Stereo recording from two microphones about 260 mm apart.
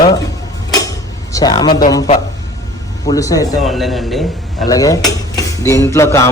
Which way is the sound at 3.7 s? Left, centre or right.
Centre.